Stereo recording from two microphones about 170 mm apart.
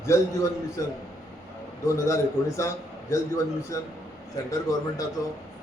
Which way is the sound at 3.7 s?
20° left (ahead or behind).